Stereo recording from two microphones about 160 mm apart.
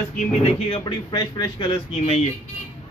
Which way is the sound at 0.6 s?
35° left (ahead or behind).